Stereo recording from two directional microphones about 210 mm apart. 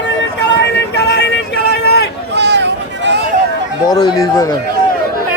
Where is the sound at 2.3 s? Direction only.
55° right (ahead or behind).